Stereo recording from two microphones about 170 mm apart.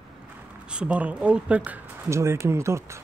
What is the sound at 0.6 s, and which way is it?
Speech, 5° right (ahead or behind).